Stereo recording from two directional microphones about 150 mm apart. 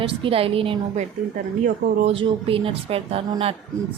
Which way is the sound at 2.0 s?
35° right (ahead or behind).